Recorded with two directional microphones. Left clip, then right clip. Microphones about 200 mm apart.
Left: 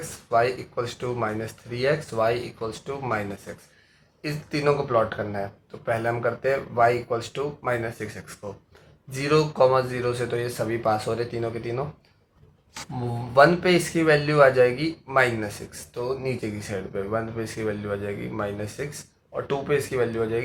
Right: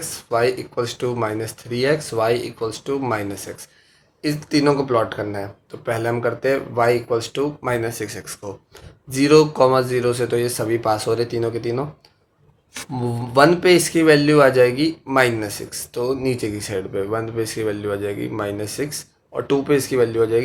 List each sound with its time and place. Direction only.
0.1 s speech: 45° right (ahead or behind)
13.3 s speech: 45° right (ahead or behind)